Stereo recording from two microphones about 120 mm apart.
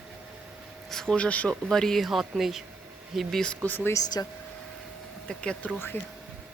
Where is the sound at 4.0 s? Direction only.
30° left (ahead or behind).